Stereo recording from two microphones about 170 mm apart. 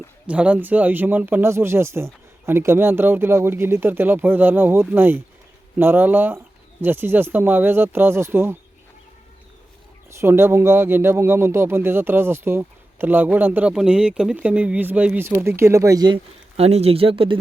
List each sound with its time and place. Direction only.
0.3 s a man's voice: 10° right (ahead or behind)
10.2 s a man's voice: 15° right (ahead or behind); by 17.3 s 30° right (ahead or behind)